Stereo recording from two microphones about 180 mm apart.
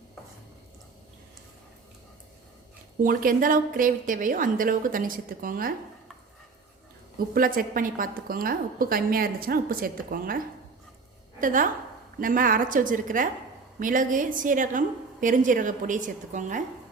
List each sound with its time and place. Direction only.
3.0 s a woman's voice: 50° right (ahead or behind)
7.3 s a woman's voice: 50° right (ahead or behind)